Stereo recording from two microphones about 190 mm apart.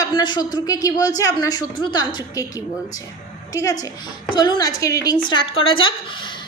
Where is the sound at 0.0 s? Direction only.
20° left (ahead or behind).